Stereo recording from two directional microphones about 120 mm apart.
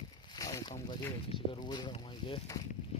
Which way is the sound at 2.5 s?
25° left (ahead or behind).